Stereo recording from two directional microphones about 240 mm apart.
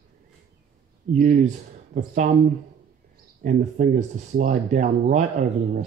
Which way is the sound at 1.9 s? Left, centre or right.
Right.